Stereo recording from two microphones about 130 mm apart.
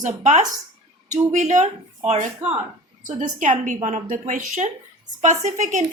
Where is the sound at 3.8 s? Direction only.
65° right (ahead or behind).